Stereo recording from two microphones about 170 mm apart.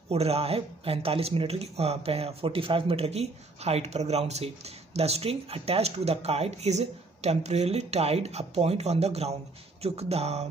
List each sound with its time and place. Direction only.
0.1 s speech: 35° right (ahead or behind)